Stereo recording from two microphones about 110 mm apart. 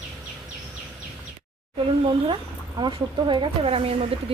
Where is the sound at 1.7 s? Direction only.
50° right (ahead or behind).